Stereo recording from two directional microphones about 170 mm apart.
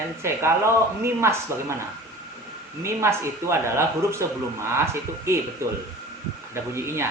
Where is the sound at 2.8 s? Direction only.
15° right (ahead or behind).